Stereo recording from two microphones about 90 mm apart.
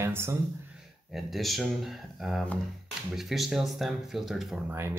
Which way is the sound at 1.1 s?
Centre (ahead or behind).